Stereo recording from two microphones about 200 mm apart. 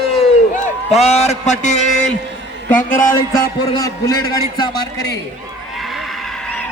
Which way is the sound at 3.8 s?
15° left (ahead or behind).